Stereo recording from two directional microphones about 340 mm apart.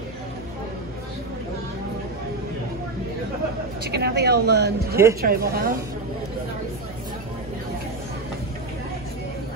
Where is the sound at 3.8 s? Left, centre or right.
Right.